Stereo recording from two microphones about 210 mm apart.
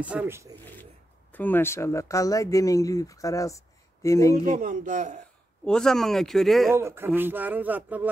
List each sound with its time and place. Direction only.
0.0 s speech: 10° right (ahead or behind)
1.3 s speech: 10° left (ahead or behind)
4.5 s speech: 40° right (ahead or behind)
5.7 s speech: centre (ahead or behind)
6.7 s speech: 10° right (ahead or behind)